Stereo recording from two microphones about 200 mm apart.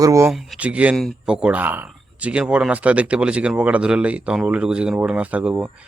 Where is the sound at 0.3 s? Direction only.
Centre (ahead or behind).